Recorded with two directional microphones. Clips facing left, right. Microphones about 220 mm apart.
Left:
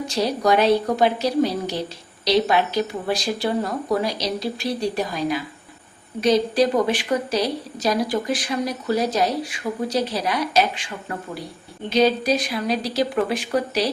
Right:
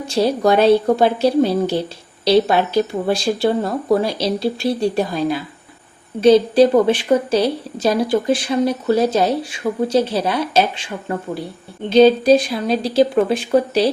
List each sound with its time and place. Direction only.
0.1 s a woman's voice: 30° right (ahead or behind)